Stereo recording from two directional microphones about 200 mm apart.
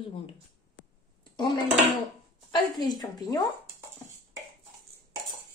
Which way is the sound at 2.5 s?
20° left (ahead or behind).